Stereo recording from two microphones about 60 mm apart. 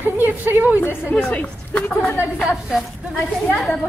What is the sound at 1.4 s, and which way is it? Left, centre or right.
Chatter, left.